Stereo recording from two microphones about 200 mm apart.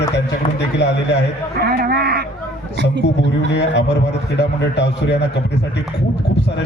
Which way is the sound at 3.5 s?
60° left (ahead or behind).